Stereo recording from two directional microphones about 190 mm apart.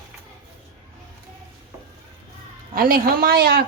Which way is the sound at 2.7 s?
50° right (ahead or behind).